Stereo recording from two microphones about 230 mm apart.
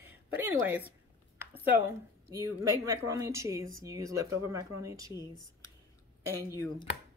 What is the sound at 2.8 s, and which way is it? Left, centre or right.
Speech, centre.